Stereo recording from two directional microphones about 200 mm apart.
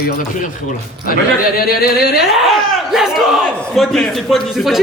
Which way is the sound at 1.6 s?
50° left (ahead or behind).